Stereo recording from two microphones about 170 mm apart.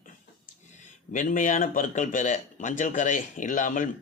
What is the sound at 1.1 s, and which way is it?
Speech, 50° left (ahead or behind).